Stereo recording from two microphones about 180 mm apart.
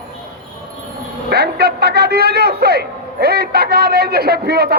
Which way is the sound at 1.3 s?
65° right (ahead or behind).